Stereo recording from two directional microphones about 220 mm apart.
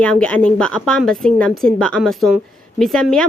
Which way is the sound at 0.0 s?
5° left (ahead or behind).